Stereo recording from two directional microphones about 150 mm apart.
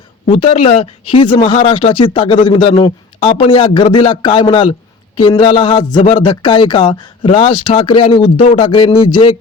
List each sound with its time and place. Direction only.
0.3 s speech: 35° left (ahead or behind)